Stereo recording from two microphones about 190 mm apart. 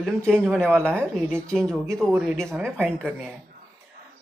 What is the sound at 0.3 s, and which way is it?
Speech, 5° left (ahead or behind).